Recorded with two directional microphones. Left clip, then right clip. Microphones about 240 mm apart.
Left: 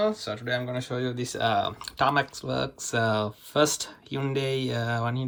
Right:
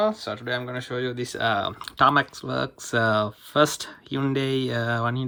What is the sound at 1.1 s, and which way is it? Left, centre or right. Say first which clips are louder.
Speech: right 1 dB; centre.